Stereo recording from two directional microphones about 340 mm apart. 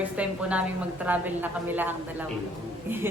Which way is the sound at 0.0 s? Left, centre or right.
Centre.